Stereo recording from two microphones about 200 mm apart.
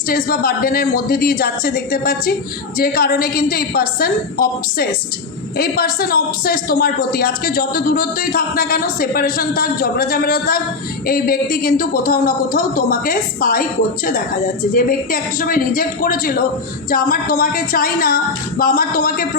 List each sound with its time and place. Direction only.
0.1 s a man's voice: 50° left (ahead or behind)